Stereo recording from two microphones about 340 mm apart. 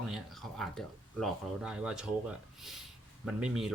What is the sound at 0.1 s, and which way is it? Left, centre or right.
Speech, centre.